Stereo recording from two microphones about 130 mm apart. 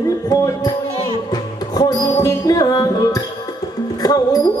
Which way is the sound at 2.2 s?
30° left (ahead or behind).